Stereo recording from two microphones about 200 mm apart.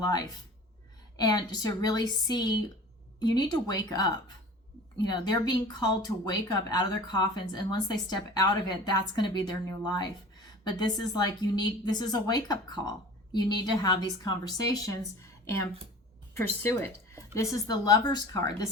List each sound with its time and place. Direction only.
0.0 s a woman's voice: 20° left (ahead or behind)
16.3 s a woman's voice: 10° left (ahead or behind)